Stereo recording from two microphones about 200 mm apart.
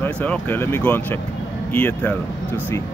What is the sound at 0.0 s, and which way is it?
Speech, 10° left (ahead or behind).